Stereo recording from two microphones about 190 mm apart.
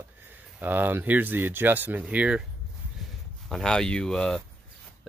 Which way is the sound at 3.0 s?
Centre (ahead or behind).